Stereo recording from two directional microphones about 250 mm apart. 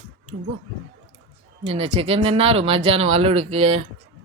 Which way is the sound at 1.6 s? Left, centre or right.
Right.